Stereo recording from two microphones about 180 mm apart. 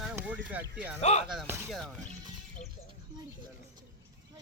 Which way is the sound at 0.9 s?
35° left (ahead or behind).